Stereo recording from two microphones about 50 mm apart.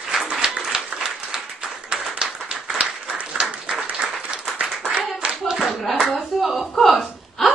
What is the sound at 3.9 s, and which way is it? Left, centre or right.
Clapping, right.